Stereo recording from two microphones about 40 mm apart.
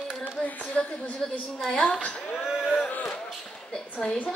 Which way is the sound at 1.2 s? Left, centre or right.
Centre.